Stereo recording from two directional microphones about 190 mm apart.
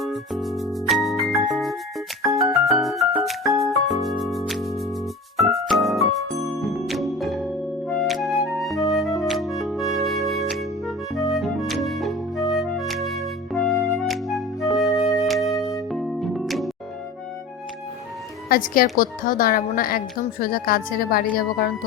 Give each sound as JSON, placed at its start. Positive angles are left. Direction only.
{"t": 0.0, "sound": "music", "side_deg": 0}
{"t": 14.7, "sound": "flute", "side_deg": 0}
{"t": 15.3, "sound": "music", "side_deg": 0}
{"t": 15.5, "sound": "music", "side_deg": 15}
{"t": 15.9, "sound": "music", "side_deg": 0}
{"t": 18.4, "sound": "speech", "side_deg": 50}